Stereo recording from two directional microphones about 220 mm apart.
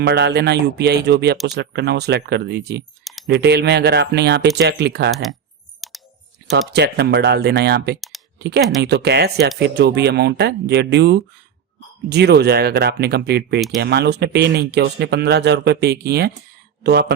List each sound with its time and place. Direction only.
0.0 s speech: 50° right (ahead or behind)
5.1 s speech: centre (ahead or behind)
5.8 s clicking: centre (ahead or behind)
6.5 s speech: 50° right (ahead or behind)